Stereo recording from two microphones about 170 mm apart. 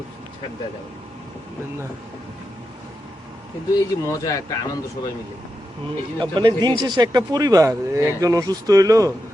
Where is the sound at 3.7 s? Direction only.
20° left (ahead or behind).